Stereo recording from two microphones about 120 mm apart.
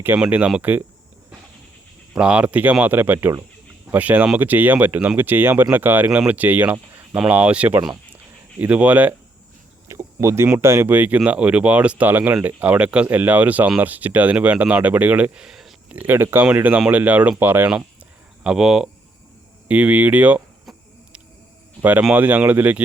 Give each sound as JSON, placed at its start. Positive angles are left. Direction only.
{"t": 0.2, "sound": "speech", "side_deg": -10}
{"t": 2.1, "sound": "speech", "side_deg": -10}
{"t": 9.9, "sound": "a sound", "side_deg": -25}
{"t": 10.6, "sound": "speech", "side_deg": -20}
{"t": 16.0, "sound": "speech", "side_deg": -15}
{"t": 18.4, "sound": "speech", "side_deg": -5}
{"t": 21.8, "sound": "speech", "side_deg": -15}